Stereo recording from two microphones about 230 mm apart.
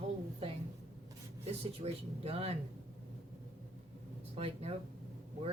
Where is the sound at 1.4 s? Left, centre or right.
Right.